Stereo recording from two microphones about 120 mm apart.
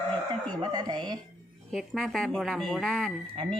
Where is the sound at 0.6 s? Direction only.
35° right (ahead or behind).